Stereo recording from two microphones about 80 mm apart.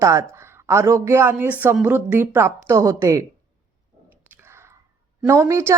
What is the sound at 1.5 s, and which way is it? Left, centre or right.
Speech, right.